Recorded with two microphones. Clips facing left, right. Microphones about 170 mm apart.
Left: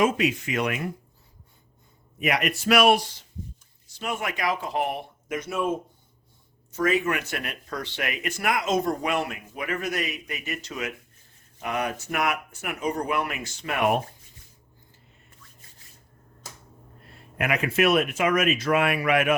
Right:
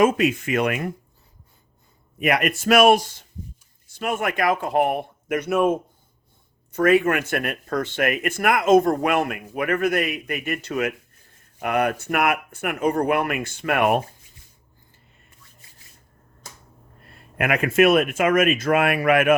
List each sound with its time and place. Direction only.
0.0 s speech: 50° right (ahead or behind)
2.1 s speech: 55° right (ahead or behind)
17.3 s speech: 55° right (ahead or behind)